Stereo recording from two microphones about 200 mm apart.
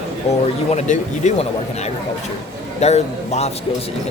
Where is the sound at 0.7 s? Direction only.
35° left (ahead or behind).